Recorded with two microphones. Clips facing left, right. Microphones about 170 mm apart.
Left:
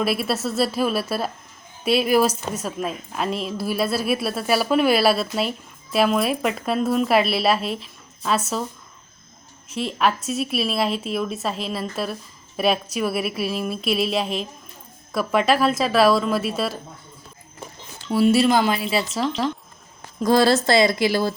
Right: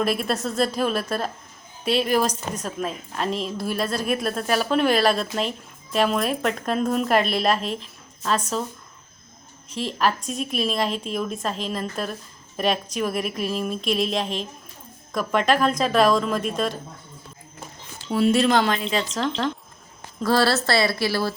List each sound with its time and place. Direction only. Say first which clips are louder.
0.0 s a woman's voice: left 1 dB; 5° left (ahead or behind)
9.6 s a woman's voice: left 2 dB; 35° right (ahead or behind)
10.0 s a woman's voice: left 2 dB; 5° left (ahead or behind)
18.1 s a woman's voice: left 2 dB; 5° left (ahead or behind)